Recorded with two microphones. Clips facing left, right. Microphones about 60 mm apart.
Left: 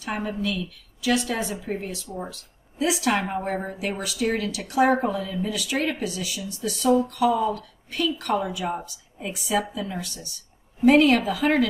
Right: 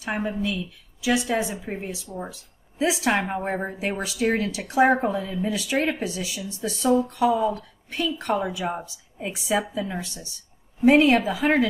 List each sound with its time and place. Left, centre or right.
0.0 s speech: right
2.3 s a woman's voice: right